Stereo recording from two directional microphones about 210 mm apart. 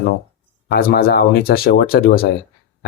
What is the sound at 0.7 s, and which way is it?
Speech, 50° left (ahead or behind).